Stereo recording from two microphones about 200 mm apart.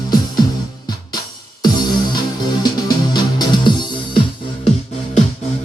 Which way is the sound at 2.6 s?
20° left (ahead or behind).